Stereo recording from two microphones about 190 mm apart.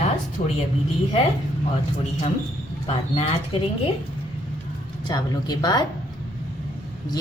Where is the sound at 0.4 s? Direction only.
35° left (ahead or behind).